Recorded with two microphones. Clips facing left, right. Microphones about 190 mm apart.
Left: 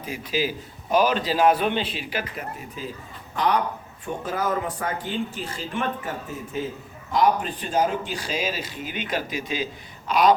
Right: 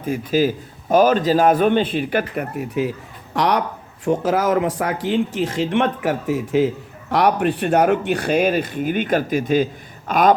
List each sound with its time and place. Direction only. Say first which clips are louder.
0.0 s a man's voice: right 8 dB; 50° right (ahead or behind); by 3.6 s 75° right (ahead or behind)
4.0 s a man's voice: right 9 dB; 85° right; by 10.3 s 50° right (ahead or behind)